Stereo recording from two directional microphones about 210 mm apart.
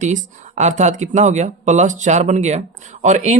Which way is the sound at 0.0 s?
35° right (ahead or behind).